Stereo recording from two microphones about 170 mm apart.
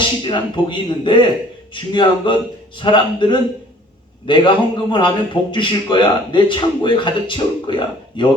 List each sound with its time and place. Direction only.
0.0 s a man's voice: 30° left (ahead or behind)